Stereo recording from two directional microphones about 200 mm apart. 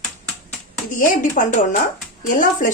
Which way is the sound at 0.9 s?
40° left (ahead or behind).